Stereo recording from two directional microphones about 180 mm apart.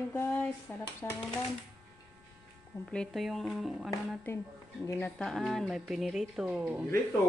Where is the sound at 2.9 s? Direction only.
5° left (ahead or behind).